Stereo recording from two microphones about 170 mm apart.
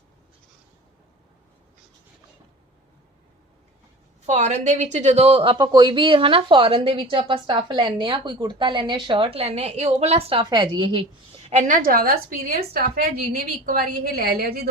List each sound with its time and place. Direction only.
4.3 s a woman's voice: 40° right (ahead or behind)
11.4 s a woman's voice: 45° right (ahead or behind); by 14.7 s 65° right (ahead or behind)